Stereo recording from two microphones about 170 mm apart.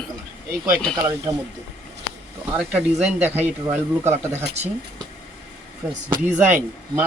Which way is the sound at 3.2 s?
10° right (ahead or behind).